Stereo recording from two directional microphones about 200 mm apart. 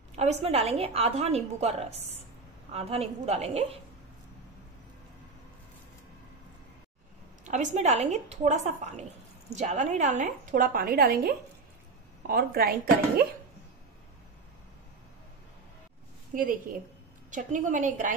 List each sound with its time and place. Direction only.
0.1 s a woman's voice: 35° right (ahead or behind)
7.4 s a woman's voice: 35° right (ahead or behind)
16.3 s a woman's voice: 45° right (ahead or behind)